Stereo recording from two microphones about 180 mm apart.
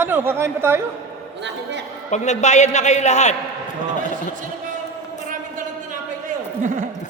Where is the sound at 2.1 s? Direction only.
40° left (ahead or behind).